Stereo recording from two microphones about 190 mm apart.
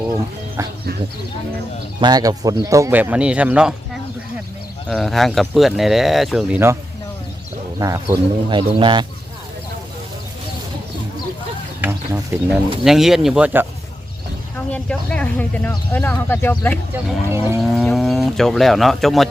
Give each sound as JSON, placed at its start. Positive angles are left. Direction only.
{"t": 0.1, "sound": "speech", "side_deg": -20}
{"t": 2.0, "sound": "speech", "side_deg": -20}
{"t": 4.9, "sound": "speech", "side_deg": 0}
{"t": 7.8, "sound": "speech", "side_deg": -20}
{"t": 11.8, "sound": "a sound", "side_deg": -15}
{"t": 12.8, "sound": "speech", "side_deg": 0}
{"t": 14.7, "sound": "speech", "side_deg": 5}
{"t": 16.9, "sound": "speech", "side_deg": -10}
{"t": 17.6, "sound": "speech", "side_deg": 0}